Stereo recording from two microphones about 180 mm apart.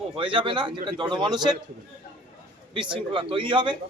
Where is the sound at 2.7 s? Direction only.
25° right (ahead or behind).